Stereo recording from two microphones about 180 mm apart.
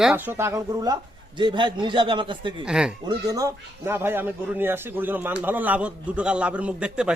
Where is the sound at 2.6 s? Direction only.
5° right (ahead or behind).